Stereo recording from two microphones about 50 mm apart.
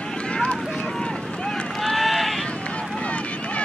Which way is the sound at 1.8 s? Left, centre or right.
Centre.